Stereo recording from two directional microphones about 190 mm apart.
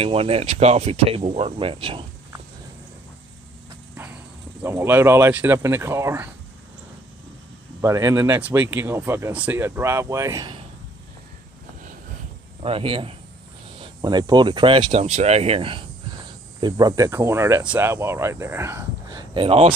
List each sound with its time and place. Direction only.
0.0 s speech: 30° right (ahead or behind)
4.6 s speech: 10° right (ahead or behind)
7.8 s speech: 15° right (ahead or behind)
12.6 s speech: 30° right (ahead or behind)